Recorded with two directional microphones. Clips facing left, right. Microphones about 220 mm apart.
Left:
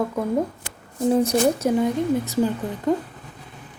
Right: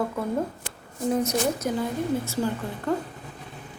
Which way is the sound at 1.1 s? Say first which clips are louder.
Left 6 dB; 30° left (ahead or behind).